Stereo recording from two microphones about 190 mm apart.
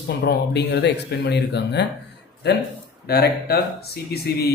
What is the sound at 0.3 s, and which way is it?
Speech, 60° left (ahead or behind).